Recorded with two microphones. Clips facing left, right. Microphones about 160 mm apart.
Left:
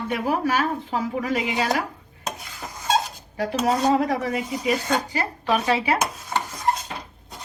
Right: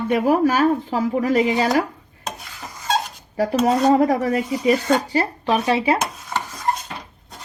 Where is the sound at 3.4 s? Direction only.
45° right (ahead or behind).